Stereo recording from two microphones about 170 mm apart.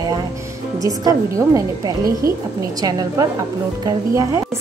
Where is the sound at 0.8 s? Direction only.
20° right (ahead or behind).